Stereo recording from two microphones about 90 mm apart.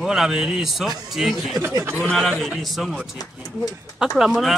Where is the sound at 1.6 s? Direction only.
30° right (ahead or behind).